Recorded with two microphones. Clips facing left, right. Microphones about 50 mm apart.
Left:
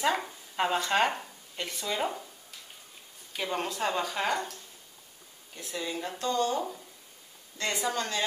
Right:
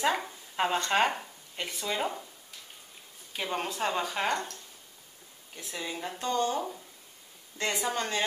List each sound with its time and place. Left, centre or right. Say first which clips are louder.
0.0 s speech: even; centre
3.3 s speech: even; centre
5.6 s speech: left 2 dB; centre
6.1 s a woman's voice: even; centre